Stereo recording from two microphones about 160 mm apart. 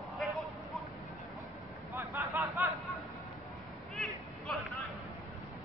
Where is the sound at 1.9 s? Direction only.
20° right (ahead or behind).